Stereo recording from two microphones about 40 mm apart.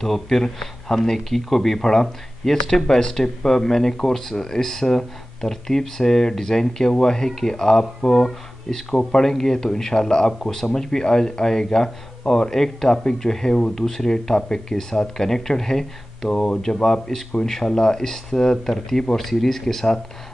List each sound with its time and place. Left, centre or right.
0.0 s speech: centre